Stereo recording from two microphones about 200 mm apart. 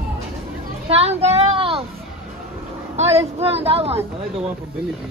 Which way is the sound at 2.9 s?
30° right (ahead or behind).